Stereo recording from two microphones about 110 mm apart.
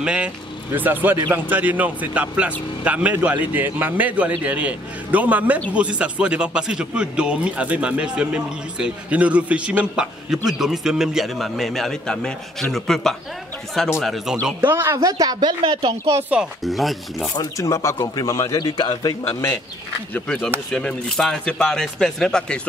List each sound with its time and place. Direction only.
0.0 s speech: 10° right (ahead or behind)
14.3 s speech: 15° right (ahead or behind); by 16.2 s 50° right (ahead or behind)
16.2 s speech: 10° right (ahead or behind)
16.6 s speech: centre (ahead or behind)
17.4 s a man's voice: 30° left (ahead or behind)
20.2 s speech: 10° left (ahead or behind)